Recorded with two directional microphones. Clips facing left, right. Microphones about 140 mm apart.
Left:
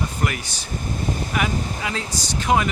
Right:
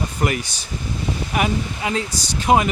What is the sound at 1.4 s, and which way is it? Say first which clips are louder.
Speech: right 6 dB; 25° right (ahead or behind).